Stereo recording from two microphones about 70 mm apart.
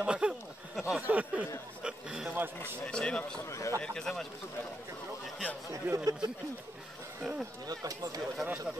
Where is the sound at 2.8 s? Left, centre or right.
Centre.